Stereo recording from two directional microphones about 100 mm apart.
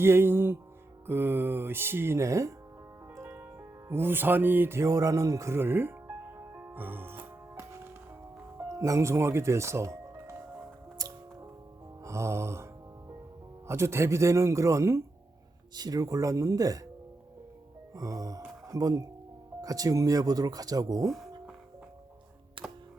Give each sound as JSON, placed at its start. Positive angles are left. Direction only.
{"t": 0.0, "sound": "speech", "side_deg": -25}
{"t": 3.2, "sound": "music", "side_deg": -15}
{"t": 8.5, "sound": "speech", "side_deg": -30}
{"t": 10.9, "sound": "music", "side_deg": -40}
{"t": 12.0, "sound": "speech", "side_deg": -30}
{"t": 13.7, "sound": "speech", "side_deg": -25}
{"t": 15.7, "sound": "speech", "side_deg": -40}
{"t": 17.9, "sound": "speech", "side_deg": -35}
{"t": 22.6, "sound": "music", "side_deg": -60}